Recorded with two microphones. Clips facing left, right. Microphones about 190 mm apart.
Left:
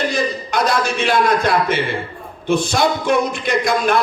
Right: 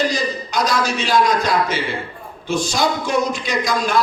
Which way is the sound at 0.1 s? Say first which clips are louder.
Left 2 dB; 55° left (ahead or behind).